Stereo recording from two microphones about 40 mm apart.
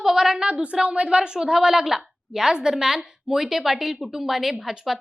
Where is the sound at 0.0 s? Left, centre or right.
Centre.